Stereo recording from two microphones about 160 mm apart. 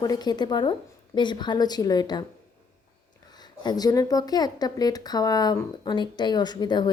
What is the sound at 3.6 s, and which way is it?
A woman's voice, 25° left (ahead or behind).